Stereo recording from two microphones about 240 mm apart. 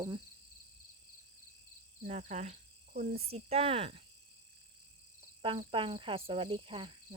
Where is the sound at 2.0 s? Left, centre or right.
Right.